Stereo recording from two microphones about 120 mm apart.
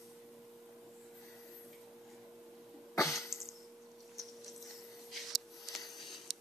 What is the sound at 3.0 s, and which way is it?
Throat clearing, 25° left (ahead or behind).